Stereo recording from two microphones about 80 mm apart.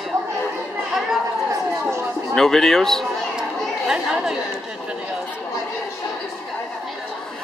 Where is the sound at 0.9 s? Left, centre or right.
Centre.